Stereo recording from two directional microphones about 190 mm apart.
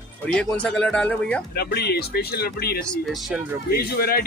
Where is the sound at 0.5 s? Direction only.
5° left (ahead or behind).